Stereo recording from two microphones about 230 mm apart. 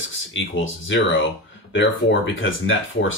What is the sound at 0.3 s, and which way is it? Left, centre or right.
Speech, left.